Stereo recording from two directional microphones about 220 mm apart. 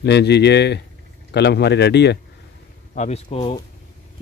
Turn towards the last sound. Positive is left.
turn(degrees=25)  # may be behind; listen again after turning